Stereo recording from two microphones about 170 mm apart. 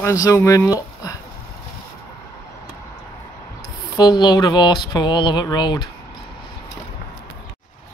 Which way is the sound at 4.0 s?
25° left (ahead or behind).